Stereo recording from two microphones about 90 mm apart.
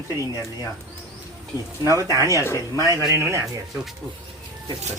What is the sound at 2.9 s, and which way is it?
Speech, 35° right (ahead or behind).